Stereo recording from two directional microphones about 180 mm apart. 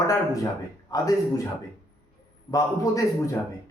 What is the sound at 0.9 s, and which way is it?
Speech, 20° left (ahead or behind).